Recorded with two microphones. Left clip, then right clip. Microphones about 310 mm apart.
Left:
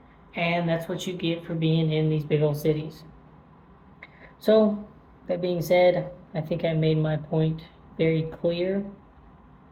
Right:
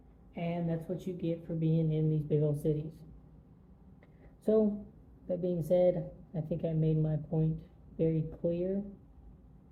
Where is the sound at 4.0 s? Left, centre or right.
Centre.